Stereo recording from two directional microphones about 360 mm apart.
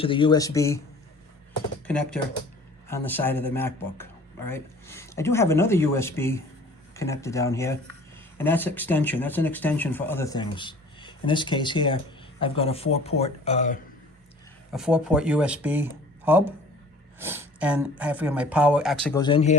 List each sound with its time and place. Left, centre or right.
0.0 s a man's voice: centre
1.9 s a man's voice: centre
14.7 s speech: centre